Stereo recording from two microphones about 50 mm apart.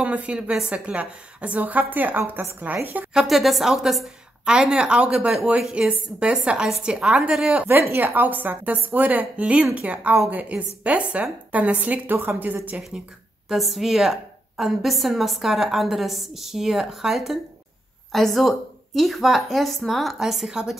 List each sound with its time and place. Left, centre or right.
0.0 s a woman's voice: right
3.1 s a woman's voice: centre
7.9 s a woman's voice: right
12.1 s a woman's voice: right
12.9 s speech: centre
13.5 s a woman's voice: centre